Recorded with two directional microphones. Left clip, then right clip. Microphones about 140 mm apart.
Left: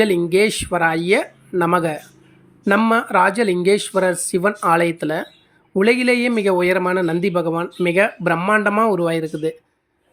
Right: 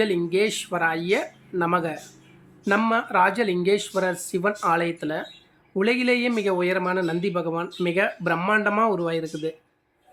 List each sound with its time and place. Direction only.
0.3 s speech: 45° left (ahead or behind)